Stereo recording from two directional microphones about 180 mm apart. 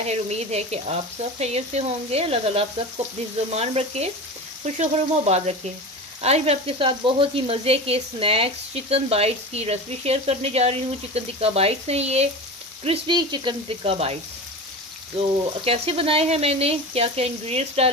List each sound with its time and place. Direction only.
0.0 s speech: 35° right (ahead or behind)
15.1 s speech: 30° right (ahead or behind)